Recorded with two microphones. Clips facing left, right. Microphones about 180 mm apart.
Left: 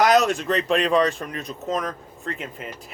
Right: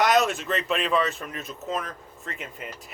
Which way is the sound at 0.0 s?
Centre (ahead or behind).